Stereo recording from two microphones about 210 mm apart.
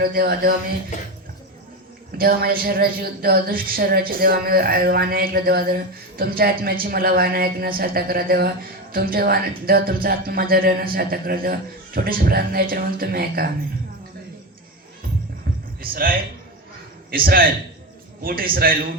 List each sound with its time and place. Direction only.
0.0 s a woman's voice: 45° right (ahead or behind)
0.9 s speech: 35° left (ahead or behind)
2.1 s a woman's voice: 45° right (ahead or behind)
15.8 s a woman's voice: 45° right (ahead or behind)